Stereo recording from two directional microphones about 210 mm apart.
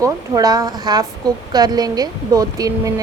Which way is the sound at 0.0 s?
15° right (ahead or behind).